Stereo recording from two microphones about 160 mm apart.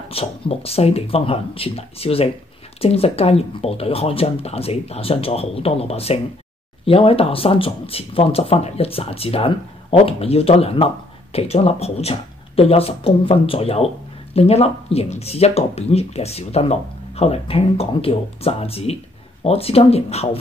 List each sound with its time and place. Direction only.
0.1 s speech: 35° left (ahead or behind)